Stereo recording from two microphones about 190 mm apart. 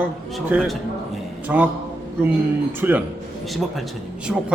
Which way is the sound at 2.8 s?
10° right (ahead or behind).